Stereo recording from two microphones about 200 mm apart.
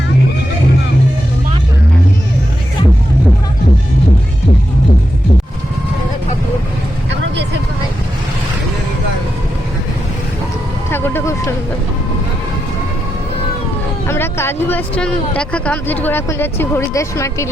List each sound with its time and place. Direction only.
10.9 s vehicle: 15° left (ahead or behind)
14.1 s a sound: 10° left (ahead or behind)
15.4 s speech: 5° left (ahead or behind)